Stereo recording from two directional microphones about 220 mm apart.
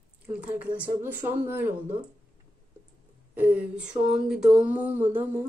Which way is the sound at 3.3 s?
10° right (ahead or behind).